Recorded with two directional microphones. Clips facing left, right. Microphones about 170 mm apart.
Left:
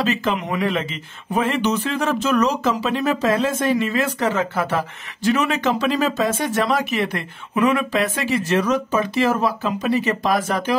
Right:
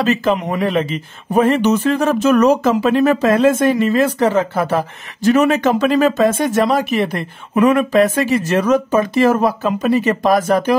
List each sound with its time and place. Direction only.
0.0 s speech: 40° right (ahead or behind)